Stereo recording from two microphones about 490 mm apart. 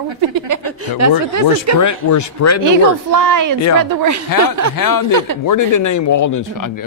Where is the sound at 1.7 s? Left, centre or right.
Left.